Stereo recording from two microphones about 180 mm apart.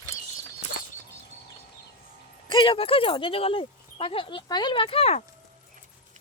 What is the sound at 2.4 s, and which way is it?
Speech, 30° left (ahead or behind).